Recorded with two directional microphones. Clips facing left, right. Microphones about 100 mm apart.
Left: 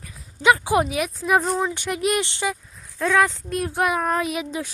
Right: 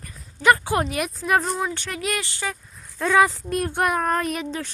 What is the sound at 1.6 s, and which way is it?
Speech, 15° left (ahead or behind).